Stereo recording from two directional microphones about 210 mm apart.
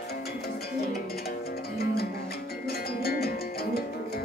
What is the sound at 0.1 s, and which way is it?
Music, 50° left (ahead or behind).